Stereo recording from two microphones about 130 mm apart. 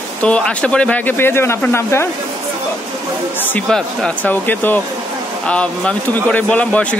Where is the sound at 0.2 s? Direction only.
10° left (ahead or behind).